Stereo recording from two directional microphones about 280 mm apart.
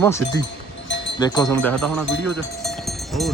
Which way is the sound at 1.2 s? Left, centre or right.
Centre.